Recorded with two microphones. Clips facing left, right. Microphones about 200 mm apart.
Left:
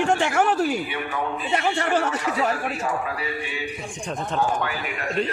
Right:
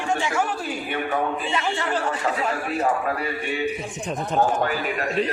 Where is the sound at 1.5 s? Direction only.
65° left (ahead or behind).